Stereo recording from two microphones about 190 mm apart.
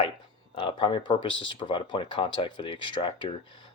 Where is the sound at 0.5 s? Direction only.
25° left (ahead or behind).